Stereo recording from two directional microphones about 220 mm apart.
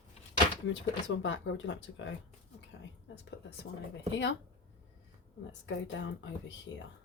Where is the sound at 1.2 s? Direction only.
55° left (ahead or behind).